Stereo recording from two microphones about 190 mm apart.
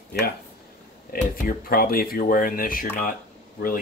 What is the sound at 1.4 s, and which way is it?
Speech, 50° left (ahead or behind).